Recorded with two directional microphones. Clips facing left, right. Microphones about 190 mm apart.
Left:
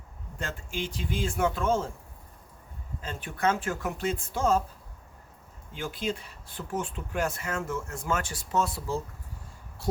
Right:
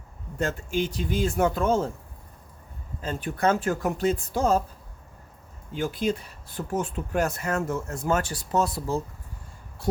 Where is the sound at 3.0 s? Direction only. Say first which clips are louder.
Right 4 dB; 35° right (ahead or behind).